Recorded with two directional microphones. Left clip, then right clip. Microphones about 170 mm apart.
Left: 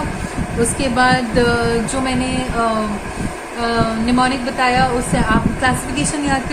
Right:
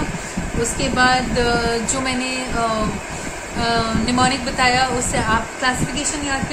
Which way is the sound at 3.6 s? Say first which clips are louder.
Left 1 dB; 5° right (ahead or behind).